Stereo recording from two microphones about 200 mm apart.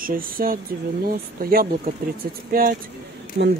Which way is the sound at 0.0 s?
45° right (ahead or behind).